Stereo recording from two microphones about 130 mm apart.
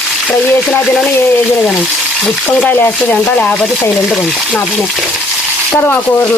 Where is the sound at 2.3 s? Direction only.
5° left (ahead or behind).